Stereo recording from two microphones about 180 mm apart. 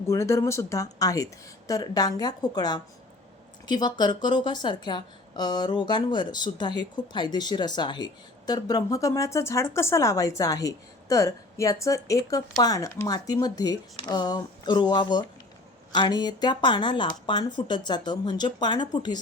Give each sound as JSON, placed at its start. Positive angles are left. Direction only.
{"t": 0.1, "sound": "a woman's voice", "side_deg": 15}